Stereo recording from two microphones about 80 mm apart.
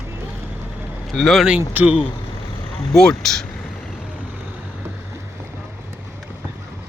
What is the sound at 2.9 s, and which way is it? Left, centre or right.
Speech, centre.